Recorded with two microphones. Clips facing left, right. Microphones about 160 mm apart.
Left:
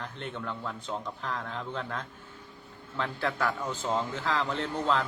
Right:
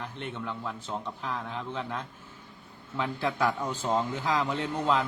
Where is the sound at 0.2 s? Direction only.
5° right (ahead or behind).